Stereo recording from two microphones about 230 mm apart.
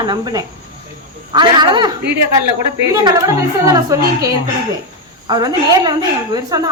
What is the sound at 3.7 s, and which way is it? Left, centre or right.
A woman's voice, centre.